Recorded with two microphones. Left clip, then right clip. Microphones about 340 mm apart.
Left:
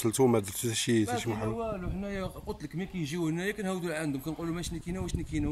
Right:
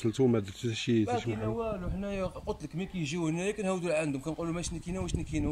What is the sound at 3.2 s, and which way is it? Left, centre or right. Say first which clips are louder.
Speech: even; centre.